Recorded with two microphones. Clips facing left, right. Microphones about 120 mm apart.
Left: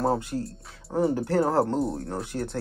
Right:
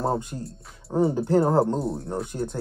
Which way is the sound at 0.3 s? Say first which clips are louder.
Left 4 dB; 10° right (ahead or behind).